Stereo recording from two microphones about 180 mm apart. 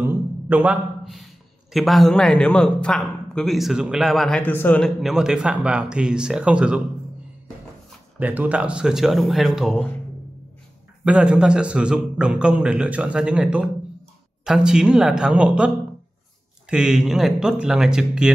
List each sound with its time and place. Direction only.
0.0 s a sound: 10° right (ahead or behind)
1.7 s a man's voice: centre (ahead or behind)
8.2 s a man's voice: 10° right (ahead or behind)
11.1 s a man's voice: 5° right (ahead or behind)